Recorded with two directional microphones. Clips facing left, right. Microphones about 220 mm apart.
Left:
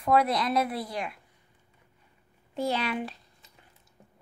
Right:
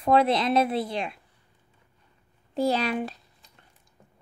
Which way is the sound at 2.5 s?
35° right (ahead or behind).